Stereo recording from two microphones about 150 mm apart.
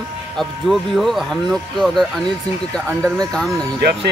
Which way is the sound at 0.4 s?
Centre (ahead or behind).